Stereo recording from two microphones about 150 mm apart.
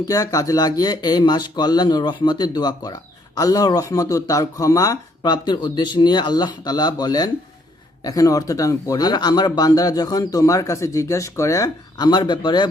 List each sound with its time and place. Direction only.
0.1 s speech: 25° left (ahead or behind)